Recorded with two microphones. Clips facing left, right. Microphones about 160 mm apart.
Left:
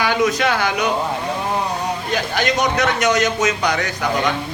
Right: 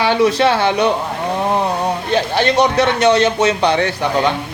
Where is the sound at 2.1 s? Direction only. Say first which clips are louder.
Right 6 dB; 30° right (ahead or behind).